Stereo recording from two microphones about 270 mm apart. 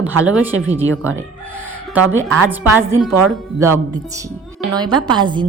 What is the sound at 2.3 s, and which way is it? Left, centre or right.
A woman's voice, centre.